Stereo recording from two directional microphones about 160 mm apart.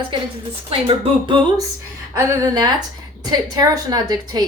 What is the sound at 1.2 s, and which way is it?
Speech, 30° right (ahead or behind).